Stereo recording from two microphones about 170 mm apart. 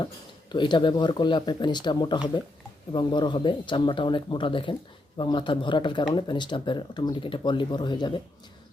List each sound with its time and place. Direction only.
0.5 s speech: 25° left (ahead or behind)